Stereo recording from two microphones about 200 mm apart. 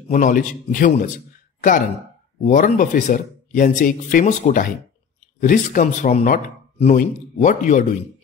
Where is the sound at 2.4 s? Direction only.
35° left (ahead or behind).